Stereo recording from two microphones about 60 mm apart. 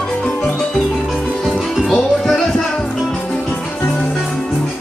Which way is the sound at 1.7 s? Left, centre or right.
Centre.